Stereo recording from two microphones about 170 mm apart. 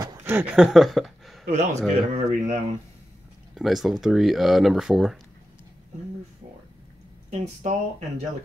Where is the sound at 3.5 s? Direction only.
Centre (ahead or behind).